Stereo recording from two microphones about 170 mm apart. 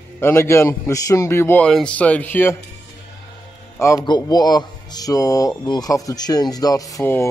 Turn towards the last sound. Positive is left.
turn(degrees=15)  # may be behind; listen again after turning